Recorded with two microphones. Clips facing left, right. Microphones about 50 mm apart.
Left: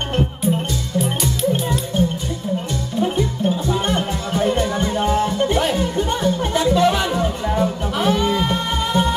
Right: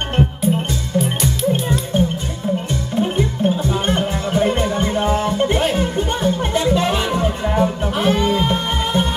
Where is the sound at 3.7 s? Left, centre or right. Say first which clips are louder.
Right 1 dB; right.